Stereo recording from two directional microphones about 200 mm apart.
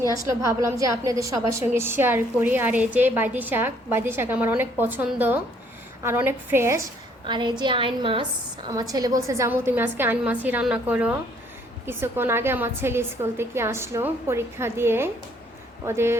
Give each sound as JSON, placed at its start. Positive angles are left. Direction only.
{"t": 0.1, "sound": "a woman's voice", "side_deg": -15}
{"t": 7.3, "sound": "a woman's voice", "side_deg": -25}